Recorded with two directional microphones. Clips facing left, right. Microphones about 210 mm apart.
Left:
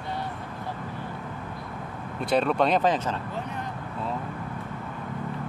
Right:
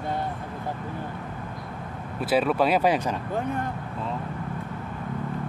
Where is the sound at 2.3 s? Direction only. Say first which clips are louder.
Right 1 dB; 5° right (ahead or behind).